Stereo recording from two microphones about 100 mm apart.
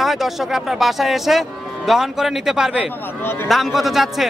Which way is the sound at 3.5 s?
Centre (ahead or behind).